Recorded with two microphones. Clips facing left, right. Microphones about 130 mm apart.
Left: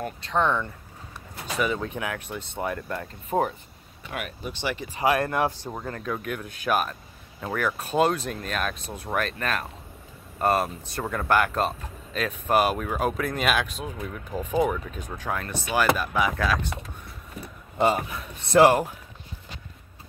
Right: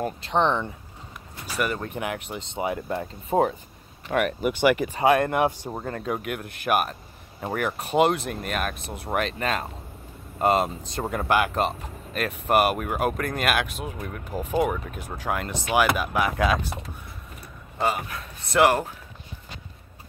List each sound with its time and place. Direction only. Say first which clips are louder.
0.0 s speech: right 2 dB; 30° right (ahead or behind)
1.6 s speech: even; 5° right (ahead or behind); by 3.1 s 20° right (ahead or behind)
3.3 s speech: right 3 dB; 35° right (ahead or behind)
4.1 s speech: right 10 dB; 60° right (ahead or behind)
5.0 s speech: right 3 dB; 25° right (ahead or behind)
5.8 s speech: right 2 dB; 35° right (ahead or behind)
6.2 s speech: right 1 dB; 10° right (ahead or behind)
17.7 s speech: left 3 dB; 25° left (ahead or behind)